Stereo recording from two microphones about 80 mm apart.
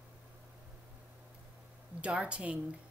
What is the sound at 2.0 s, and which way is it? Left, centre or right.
Speech, centre.